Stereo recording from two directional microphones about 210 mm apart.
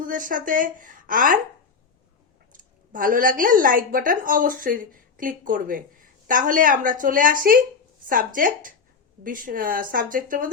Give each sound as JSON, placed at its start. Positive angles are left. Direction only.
{"t": 0.0, "sound": "a woman's voice", "side_deg": -40}
{"t": 2.5, "sound": "a woman's voice", "side_deg": -40}